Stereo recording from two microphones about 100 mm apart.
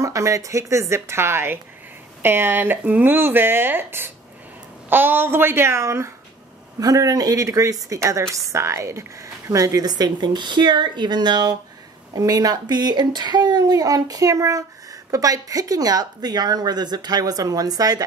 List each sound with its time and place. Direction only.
0.0 s a woman's voice: 35° right (ahead or behind)